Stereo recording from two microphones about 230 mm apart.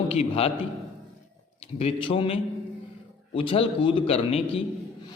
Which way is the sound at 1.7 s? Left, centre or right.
Left.